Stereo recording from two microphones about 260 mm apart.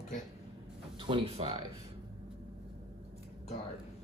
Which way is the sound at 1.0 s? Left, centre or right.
Centre.